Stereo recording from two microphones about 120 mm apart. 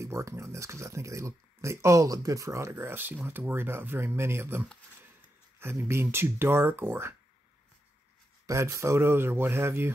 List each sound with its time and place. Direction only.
0.0 s speech: 25° right (ahead or behind)
8.5 s speech: 25° right (ahead or behind)